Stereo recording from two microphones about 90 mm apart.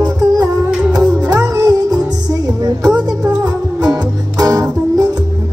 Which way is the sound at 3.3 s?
45° right (ahead or behind).